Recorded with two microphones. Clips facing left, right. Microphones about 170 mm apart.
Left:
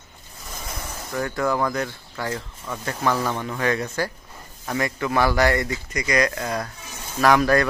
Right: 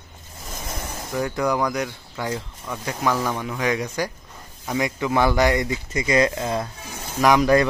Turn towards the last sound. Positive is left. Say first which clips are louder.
# right 1 dB
turn(degrees=-20)  # may be behind; listen again after turning